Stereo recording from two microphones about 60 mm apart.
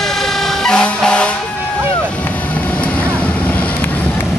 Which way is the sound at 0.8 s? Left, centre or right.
Centre.